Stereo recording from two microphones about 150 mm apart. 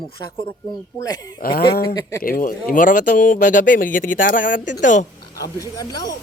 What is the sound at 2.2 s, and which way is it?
Speech, 70° left (ahead or behind).